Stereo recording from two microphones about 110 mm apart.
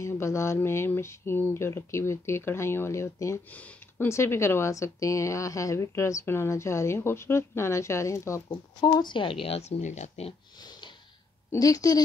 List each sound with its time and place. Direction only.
0.0 s a woman's voice: 25° left (ahead or behind)
3.5 s speech: 15° left (ahead or behind)
4.1 s a woman's voice: 25° left (ahead or behind)
8.8 s speech: 45° left (ahead or behind); by 10.3 s 85° left
11.5 s speech: 30° left (ahead or behind)